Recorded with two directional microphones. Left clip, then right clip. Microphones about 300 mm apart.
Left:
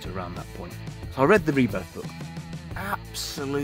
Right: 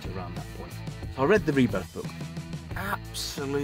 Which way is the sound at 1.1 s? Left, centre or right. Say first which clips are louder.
Left 4 dB; centre.